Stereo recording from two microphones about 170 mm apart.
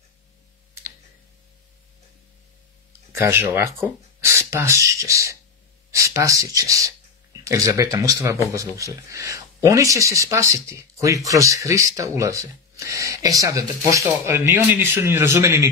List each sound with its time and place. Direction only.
3.1 s speech: 15° right (ahead or behind)